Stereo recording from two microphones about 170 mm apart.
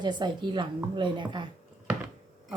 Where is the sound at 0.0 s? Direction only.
25° right (ahead or behind).